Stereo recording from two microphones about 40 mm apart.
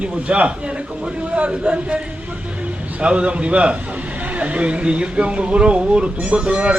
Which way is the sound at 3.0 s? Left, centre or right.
Right.